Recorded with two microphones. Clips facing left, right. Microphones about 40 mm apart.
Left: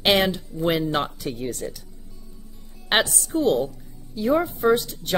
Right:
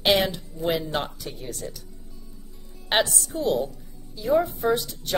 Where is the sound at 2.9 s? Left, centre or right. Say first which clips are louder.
Left 2 dB; left.